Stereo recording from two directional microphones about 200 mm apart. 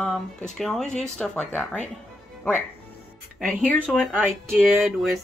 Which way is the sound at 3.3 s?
5° left (ahead or behind).